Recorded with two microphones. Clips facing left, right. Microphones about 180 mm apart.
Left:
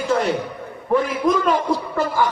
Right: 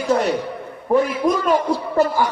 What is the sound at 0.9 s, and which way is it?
Speech, 45° right (ahead or behind).